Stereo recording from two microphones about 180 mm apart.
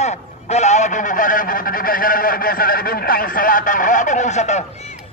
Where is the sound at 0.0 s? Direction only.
40° left (ahead or behind).